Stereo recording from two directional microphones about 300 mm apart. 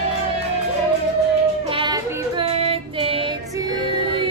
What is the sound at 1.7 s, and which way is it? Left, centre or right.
Child singing, centre.